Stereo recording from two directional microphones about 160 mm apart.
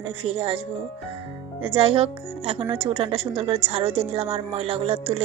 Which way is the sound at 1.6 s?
35° right (ahead or behind).